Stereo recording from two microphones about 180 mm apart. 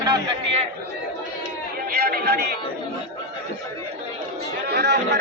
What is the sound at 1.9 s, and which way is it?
Speech, 60° right (ahead or behind).